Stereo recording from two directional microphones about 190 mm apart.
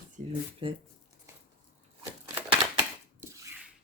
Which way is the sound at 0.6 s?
30° right (ahead or behind).